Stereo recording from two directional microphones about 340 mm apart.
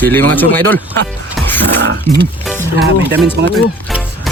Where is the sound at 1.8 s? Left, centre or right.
Right.